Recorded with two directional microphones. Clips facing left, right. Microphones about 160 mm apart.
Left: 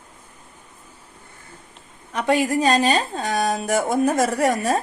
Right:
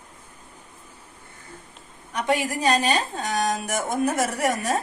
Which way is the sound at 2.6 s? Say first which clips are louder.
Left 3 dB; 35° left (ahead or behind).